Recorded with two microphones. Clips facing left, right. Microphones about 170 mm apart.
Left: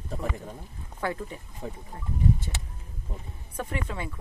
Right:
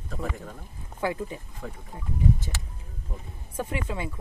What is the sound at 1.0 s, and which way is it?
Speech, 15° right (ahead or behind).